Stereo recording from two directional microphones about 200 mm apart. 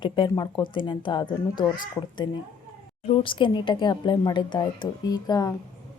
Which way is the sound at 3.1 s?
25° left (ahead or behind).